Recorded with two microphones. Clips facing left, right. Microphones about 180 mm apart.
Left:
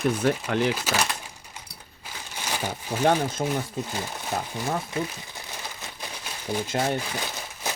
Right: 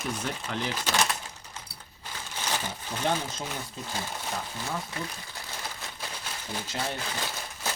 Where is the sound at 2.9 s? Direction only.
35° left (ahead or behind).